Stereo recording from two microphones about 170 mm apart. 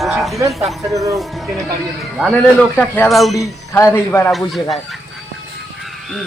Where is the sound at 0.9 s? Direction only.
20° right (ahead or behind).